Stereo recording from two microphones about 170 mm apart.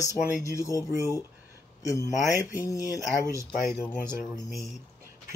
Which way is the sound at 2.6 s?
20° left (ahead or behind).